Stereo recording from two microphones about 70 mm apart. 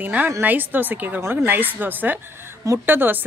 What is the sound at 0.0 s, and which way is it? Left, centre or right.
A woman's voice, right.